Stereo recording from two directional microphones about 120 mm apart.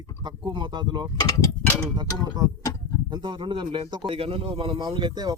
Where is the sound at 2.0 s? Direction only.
35° right (ahead or behind).